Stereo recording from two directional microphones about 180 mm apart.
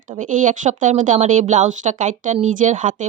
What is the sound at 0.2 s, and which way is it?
Speech, 45° right (ahead or behind).